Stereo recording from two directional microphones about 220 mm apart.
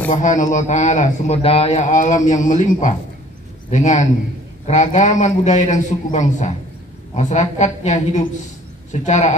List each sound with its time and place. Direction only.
0.1 s a man's voice: 35° left (ahead or behind)